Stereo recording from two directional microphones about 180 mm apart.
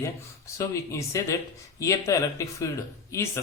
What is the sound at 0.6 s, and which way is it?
Speech, 20° left (ahead or behind).